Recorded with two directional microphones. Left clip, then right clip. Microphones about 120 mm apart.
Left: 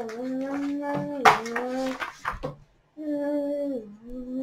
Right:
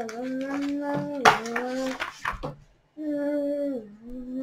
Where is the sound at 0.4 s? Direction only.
30° right (ahead or behind).